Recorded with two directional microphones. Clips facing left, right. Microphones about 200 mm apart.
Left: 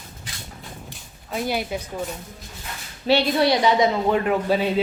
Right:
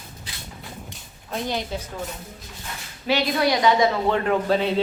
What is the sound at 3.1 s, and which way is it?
Speech, 30° left (ahead or behind).